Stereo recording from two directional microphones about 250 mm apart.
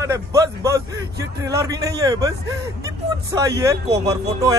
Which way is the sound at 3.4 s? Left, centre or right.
Centre.